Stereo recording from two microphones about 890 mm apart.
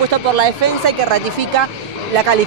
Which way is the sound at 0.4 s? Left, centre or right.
Right.